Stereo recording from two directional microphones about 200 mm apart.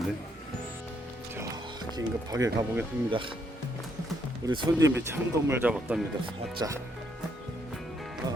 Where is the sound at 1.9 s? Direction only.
20° right (ahead or behind).